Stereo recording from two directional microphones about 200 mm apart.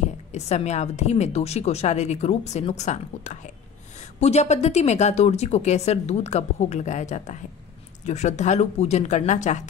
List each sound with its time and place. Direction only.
0.3 s speech: 35° left (ahead or behind)